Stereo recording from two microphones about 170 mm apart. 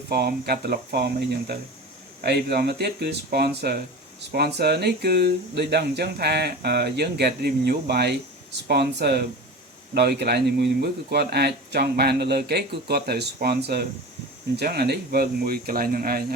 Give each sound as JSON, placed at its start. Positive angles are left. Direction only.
{"t": 0.1, "sound": "speech", "side_deg": -65}